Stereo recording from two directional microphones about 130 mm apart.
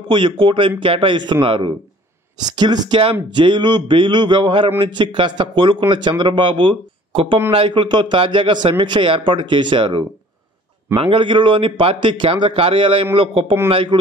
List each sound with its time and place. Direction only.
0.1 s a man's voice: 40° right (ahead or behind)